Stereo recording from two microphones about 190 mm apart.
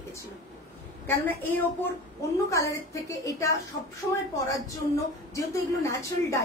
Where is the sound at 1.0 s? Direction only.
10° left (ahead or behind).